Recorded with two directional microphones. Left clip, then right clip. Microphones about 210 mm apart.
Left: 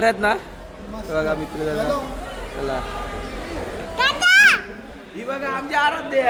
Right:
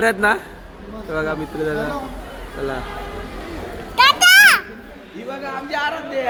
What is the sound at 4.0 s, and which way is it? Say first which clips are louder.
Children playing: right 4 dB; 40° right (ahead or behind).